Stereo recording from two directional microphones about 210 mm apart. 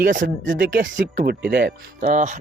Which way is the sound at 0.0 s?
40° right (ahead or behind).